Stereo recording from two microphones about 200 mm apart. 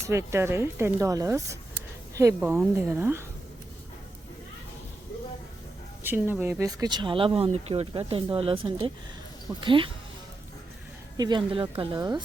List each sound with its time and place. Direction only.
0.0 s speech: 15° right (ahead or behind)
6.0 s speech: 10° right (ahead or behind); by 9.9 s 25° right (ahead or behind)
11.2 s speech: 25° right (ahead or behind)